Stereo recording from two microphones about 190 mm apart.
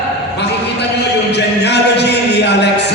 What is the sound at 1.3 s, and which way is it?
Speech, 60° left (ahead or behind).